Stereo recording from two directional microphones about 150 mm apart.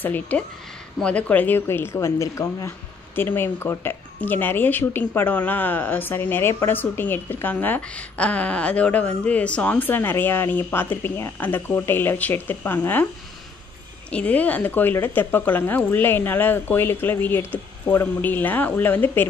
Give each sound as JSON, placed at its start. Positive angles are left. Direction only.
{"t": 0.0, "sound": "speech", "side_deg": 10}
{"t": 14.1, "sound": "speech", "side_deg": 10}